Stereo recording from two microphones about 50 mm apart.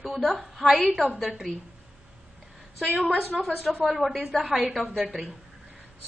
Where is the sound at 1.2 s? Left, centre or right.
Centre.